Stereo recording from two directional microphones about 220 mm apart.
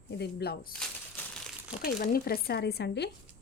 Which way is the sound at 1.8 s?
40° left (ahead or behind).